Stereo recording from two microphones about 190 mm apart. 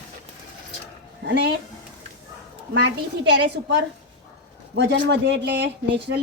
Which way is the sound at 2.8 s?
70° right (ahead or behind).